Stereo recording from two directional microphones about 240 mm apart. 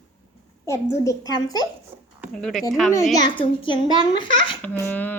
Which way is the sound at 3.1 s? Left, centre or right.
Centre.